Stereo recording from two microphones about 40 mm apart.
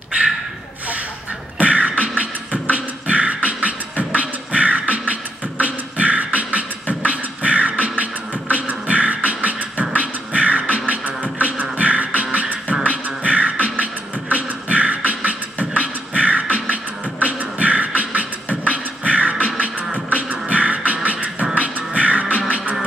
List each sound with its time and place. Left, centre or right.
1.6 s beatboxing: right
7.8 s music: right
12.8 s beatboxing: right
17.2 s music: right
20.2 s beatboxing: right
21.5 s music: right